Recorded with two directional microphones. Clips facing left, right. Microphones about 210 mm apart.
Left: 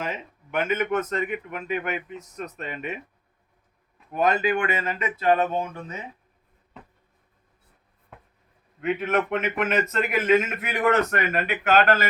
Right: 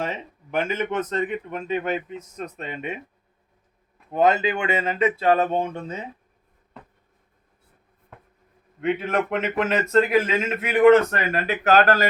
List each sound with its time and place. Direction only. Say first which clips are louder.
0.0 s speech: right 3 dB; 35° right (ahead or behind)
4.1 s speech: right 2 dB; 25° right (ahead or behind)
8.8 s a man's voice: right 1 dB; 30° right (ahead or behind)